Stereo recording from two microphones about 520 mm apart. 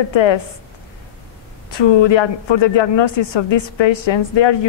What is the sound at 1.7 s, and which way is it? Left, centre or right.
A man's voice, left.